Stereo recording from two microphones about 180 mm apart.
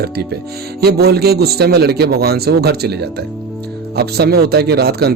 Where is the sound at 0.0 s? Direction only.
60° right (ahead or behind).